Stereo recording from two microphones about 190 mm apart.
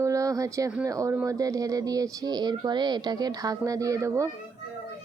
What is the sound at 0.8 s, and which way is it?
Speech, 15° right (ahead or behind).